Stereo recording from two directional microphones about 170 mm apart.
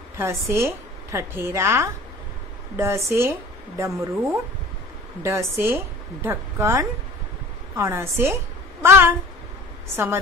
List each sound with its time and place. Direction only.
0.2 s a woman's voice: 15° right (ahead or behind)